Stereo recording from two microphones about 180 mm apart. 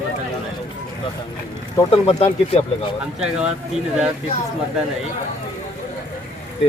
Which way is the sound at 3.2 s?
5° right (ahead or behind).